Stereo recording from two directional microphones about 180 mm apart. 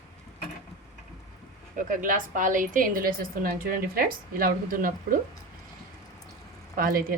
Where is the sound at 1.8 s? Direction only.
50° right (ahead or behind).